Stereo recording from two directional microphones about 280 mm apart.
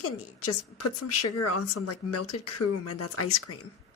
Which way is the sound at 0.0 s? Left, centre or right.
Left.